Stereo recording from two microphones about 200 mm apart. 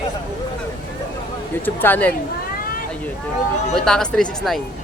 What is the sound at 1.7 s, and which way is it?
Speech, 10° left (ahead or behind).